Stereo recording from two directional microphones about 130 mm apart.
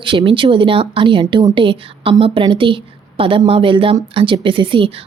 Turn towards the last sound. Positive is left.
turn(degrees=-40)  # may be behind; listen again after turning